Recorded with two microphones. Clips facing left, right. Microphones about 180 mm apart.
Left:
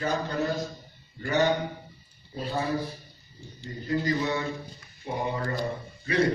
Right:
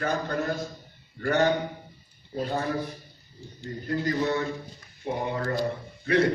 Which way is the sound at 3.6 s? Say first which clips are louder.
Even; 50° right (ahead or behind).